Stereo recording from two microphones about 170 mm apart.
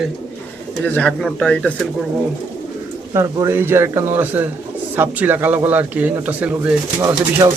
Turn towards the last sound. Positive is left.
turn(degrees=-20)  # may be behind; listen again after turning